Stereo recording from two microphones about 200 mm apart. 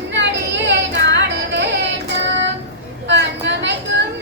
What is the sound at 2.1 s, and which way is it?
Child singing, 65° right (ahead or behind).